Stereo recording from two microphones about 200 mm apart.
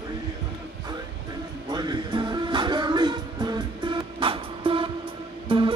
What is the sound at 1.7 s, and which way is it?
Music, 20° right (ahead or behind).